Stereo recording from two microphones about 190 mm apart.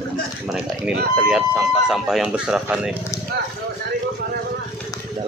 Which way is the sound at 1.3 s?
5° right (ahead or behind).